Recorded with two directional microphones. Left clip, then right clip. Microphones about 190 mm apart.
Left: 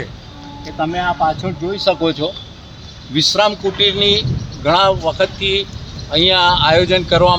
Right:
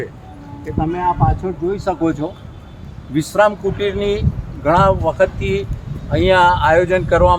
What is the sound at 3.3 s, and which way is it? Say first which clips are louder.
Speech: right 5 dB; centre (ahead or behind).